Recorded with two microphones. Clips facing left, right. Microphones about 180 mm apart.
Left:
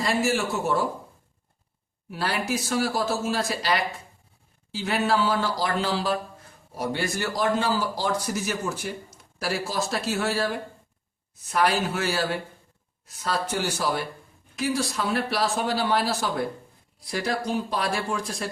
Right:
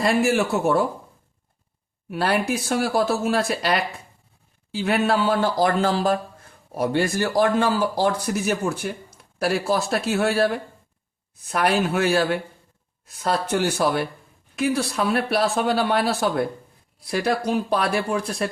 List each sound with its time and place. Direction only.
0.0 s a man's voice: 60° right (ahead or behind)
2.0 s a man's voice: 60° right (ahead or behind)